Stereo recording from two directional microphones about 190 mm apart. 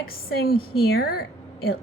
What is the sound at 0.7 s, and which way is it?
Speech, 55° left (ahead or behind).